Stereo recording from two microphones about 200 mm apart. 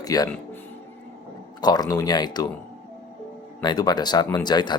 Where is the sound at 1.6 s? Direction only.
20° left (ahead or behind).